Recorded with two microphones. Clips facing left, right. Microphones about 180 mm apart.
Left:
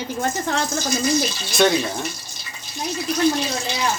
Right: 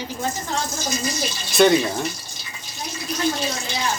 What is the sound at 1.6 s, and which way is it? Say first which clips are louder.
Speech: right 3 dB; centre (ahead or behind).